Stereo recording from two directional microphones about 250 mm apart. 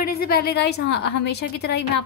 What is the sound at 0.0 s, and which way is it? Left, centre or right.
A woman's voice, left.